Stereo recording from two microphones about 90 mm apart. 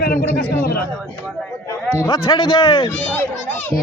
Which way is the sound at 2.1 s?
50° left (ahead or behind).